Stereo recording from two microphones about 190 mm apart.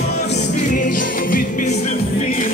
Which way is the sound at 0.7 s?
45° left (ahead or behind).